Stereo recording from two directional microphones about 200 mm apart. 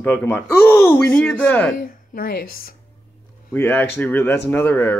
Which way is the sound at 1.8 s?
45° left (ahead or behind).